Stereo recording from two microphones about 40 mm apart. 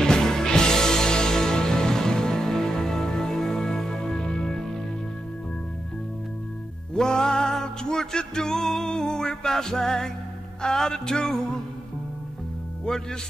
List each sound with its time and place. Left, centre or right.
0.0 s music: centre
7.0 s music: centre